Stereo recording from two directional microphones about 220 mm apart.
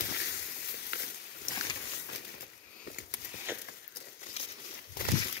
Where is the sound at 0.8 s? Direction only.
45° left (ahead or behind).